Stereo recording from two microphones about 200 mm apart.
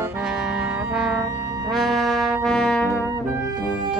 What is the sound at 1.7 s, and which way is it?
Brass instrument, centre (ahead or behind).